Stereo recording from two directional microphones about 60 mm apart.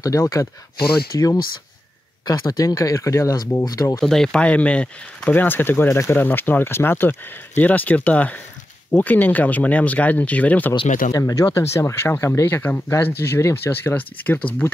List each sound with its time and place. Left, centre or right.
0.2 s speech: left
1.1 s speech: left
4.0 s speech: centre
4.4 s speech: left
5.3 s speech: left
10.7 s speech: left
11.5 s speech: left
13.9 s speech: left